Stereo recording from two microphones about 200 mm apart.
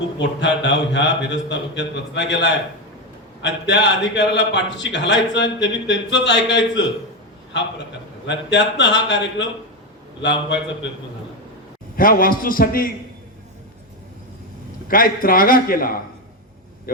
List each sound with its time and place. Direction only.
0.2 s a man's voice: 60° left (ahead or behind)
8.3 s a man's voice: 60° left (ahead or behind)
11.9 s a man's voice: 45° left (ahead or behind)
14.8 s a man's voice: 45° left (ahead or behind)